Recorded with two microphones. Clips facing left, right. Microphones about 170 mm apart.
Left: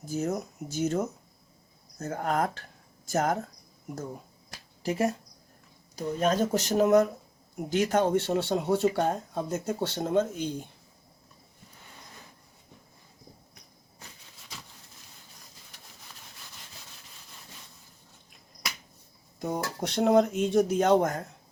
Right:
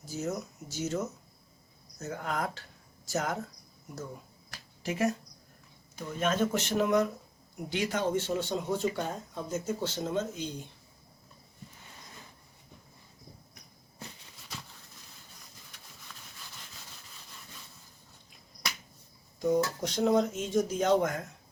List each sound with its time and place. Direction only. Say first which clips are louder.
0.0 s speech: left 4 dB; 55° left (ahead or behind)
4.8 s speech: left 2 dB; 35° left (ahead or behind); by 10.7 s 50° left (ahead or behind)
19.8 s speech: left 4 dB; 65° left (ahead or behind); by 21.3 s 40° left (ahead or behind)